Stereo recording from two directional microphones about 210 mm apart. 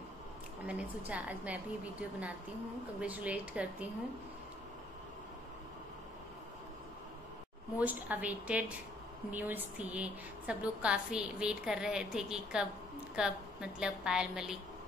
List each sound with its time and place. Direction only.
0.7 s a woman's voice: 5° right (ahead or behind)
7.8 s a woman's voice: 10° right (ahead or behind)